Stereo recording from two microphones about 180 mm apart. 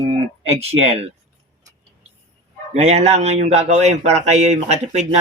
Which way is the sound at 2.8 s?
35° right (ahead or behind).